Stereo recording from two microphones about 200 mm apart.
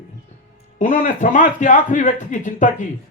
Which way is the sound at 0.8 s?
40° left (ahead or behind).